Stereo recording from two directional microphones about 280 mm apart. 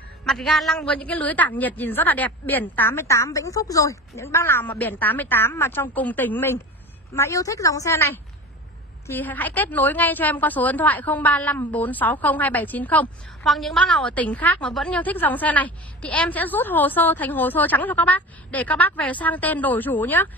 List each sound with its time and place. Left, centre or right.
0.2 s a woman's voice: centre